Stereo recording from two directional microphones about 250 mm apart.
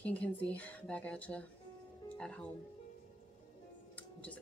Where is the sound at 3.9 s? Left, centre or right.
Centre.